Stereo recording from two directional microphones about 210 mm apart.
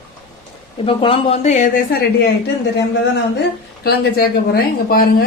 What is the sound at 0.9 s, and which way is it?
A woman's voice, 25° left (ahead or behind).